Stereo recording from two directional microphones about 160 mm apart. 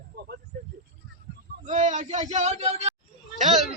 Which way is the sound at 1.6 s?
50° right (ahead or behind).